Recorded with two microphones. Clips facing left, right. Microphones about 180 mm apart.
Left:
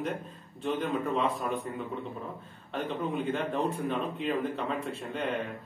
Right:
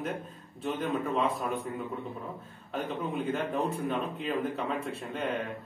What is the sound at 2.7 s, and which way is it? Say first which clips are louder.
Speech: left 1 dB; 5° right (ahead or behind).